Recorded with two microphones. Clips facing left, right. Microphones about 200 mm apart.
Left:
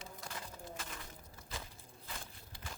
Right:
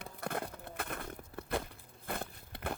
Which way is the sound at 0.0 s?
60° right (ahead or behind).